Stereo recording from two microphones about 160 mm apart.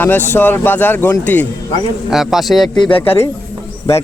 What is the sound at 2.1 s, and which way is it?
Speech, centre (ahead or behind).